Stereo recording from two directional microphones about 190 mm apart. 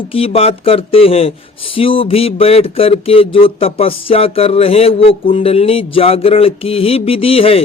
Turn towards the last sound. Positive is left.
turn(degrees=30)  # may be behind; listen again after turning